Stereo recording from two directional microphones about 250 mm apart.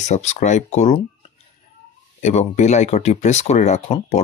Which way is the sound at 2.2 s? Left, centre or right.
Left.